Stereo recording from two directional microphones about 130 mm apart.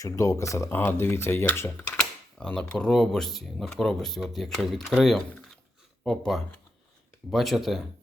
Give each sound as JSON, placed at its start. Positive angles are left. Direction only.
{"t": 0.0, "sound": "speech", "side_deg": 25}
{"t": 2.0, "sound": "speech", "side_deg": 5}
{"t": 6.1, "sound": "speech", "side_deg": 0}